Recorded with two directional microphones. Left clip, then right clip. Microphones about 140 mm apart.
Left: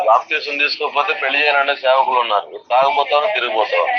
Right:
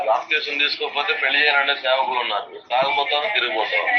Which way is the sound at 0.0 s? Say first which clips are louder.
Left 5 dB; 45° left (ahead or behind).